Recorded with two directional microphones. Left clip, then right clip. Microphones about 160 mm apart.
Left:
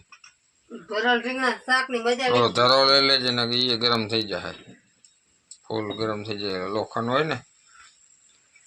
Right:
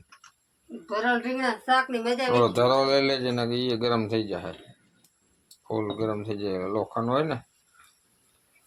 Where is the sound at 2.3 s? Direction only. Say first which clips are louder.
Left 2 dB; 15° right (ahead or behind).